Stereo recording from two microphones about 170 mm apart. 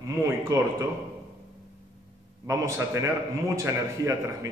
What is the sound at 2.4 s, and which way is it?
A man's voice, 15° right (ahead or behind).